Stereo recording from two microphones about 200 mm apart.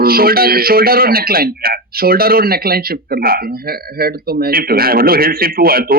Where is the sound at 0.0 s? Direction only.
50° right (ahead or behind).